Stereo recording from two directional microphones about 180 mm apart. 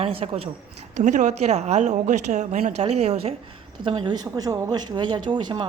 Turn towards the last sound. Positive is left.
turn(degrees=-25)  # may be behind; listen again after turning